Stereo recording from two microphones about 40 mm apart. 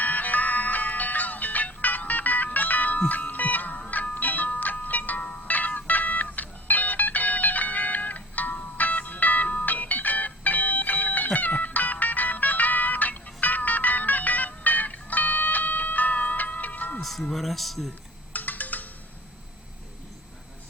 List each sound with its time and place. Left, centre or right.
0.0 s music: left
17.0 s music: centre
18.3 s music: left